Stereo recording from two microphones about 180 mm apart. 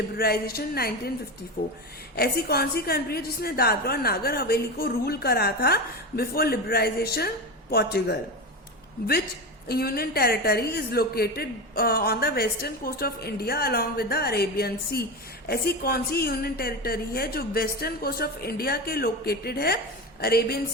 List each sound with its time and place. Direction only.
0.2 s a woman's voice: 60° left (ahead or behind)
2.1 s a woman's voice: 60° left (ahead or behind)
9.6 s a woman's voice: 60° left (ahead or behind)